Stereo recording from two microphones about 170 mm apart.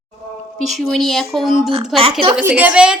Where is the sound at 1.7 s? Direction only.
35° right (ahead or behind).